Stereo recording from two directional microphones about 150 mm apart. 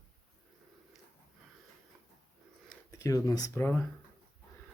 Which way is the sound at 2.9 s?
20° left (ahead or behind).